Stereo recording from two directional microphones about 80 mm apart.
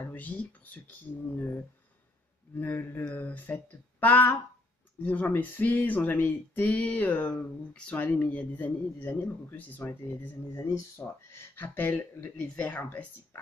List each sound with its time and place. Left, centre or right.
0.0 s speech: left